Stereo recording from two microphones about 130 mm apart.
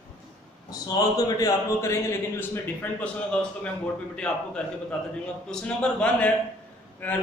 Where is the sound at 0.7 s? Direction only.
30° left (ahead or behind).